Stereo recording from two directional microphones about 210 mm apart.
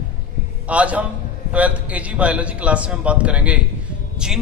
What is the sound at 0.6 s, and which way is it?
A man's voice, 5° right (ahead or behind).